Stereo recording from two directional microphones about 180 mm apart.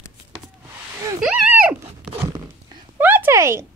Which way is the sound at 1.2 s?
5° right (ahead or behind).